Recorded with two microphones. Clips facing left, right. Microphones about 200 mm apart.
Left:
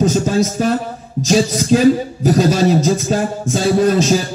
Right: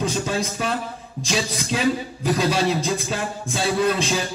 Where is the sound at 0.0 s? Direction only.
45° left (ahead or behind).